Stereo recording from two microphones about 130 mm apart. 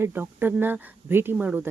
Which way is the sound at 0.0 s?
15° right (ahead or behind).